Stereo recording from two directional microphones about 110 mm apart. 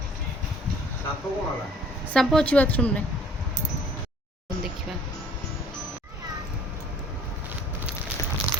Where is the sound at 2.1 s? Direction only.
10° left (ahead or behind).